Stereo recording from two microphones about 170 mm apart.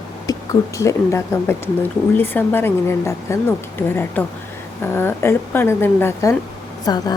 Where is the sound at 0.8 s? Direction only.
15° left (ahead or behind).